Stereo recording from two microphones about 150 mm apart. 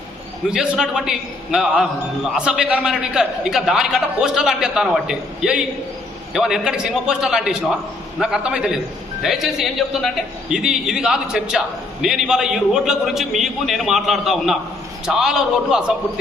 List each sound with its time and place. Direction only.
0.5 s a man's voice: 5° right (ahead or behind)